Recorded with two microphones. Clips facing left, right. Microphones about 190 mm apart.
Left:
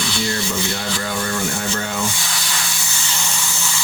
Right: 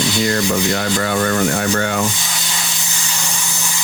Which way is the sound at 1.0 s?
65° right (ahead or behind).